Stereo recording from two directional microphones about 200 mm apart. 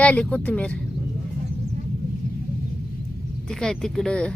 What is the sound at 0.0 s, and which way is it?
Speech, 5° left (ahead or behind).